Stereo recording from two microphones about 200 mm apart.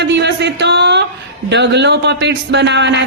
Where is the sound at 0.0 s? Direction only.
60° right (ahead or behind).